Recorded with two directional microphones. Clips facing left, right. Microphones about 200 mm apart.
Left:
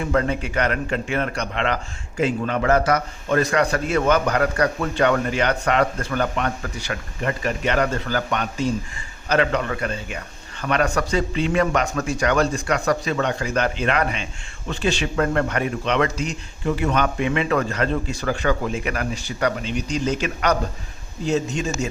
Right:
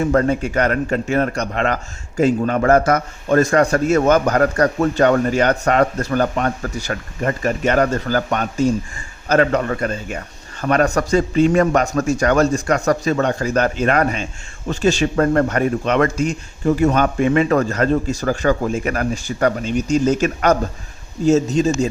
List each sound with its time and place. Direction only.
0.0 s a man's voice: 40° right (ahead or behind)